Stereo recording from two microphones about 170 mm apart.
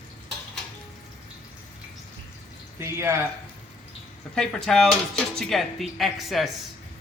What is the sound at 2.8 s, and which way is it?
Speech, 15° right (ahead or behind).